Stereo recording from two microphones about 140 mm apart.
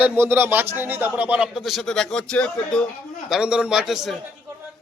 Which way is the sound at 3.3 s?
5° right (ahead or behind).